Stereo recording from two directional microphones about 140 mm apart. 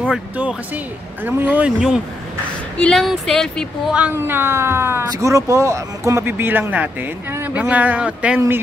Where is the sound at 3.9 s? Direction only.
15° right (ahead or behind).